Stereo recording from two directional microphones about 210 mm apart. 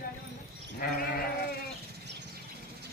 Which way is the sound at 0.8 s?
45° left (ahead or behind).